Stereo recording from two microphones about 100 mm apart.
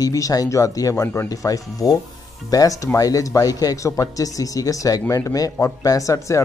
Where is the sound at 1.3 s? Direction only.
35° left (ahead or behind).